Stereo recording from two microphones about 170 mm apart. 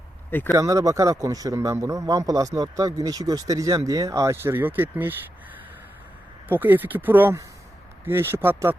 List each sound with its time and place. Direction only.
0.3 s speech: 10° left (ahead or behind)
0.5 s a man's voice: 20° right (ahead or behind)
6.5 s speech: 10° right (ahead or behind)